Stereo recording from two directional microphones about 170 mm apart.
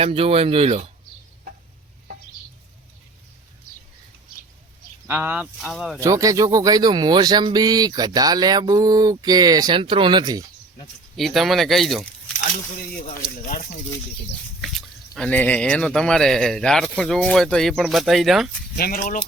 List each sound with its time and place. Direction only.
0.0 s speech: 35° right (ahead or behind)
5.0 s speech: 10° right (ahead or behind)
6.0 s speech: 20° right (ahead or behind)
11.2 s speech: centre (ahead or behind)
13.1 s speech: 55° left (ahead or behind)
14.6 s speech: centre (ahead or behind)
18.8 s speech: 55° left (ahead or behind)